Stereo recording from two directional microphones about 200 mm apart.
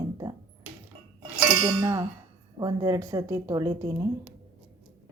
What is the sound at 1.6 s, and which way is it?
A woman's voice, 20° right (ahead or behind).